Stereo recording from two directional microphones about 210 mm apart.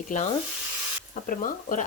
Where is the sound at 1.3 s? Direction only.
40° left (ahead or behind).